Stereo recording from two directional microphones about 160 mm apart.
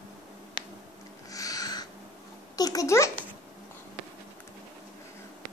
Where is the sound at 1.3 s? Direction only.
20° left (ahead or behind).